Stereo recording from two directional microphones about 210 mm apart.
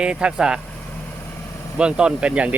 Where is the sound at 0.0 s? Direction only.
5° right (ahead or behind).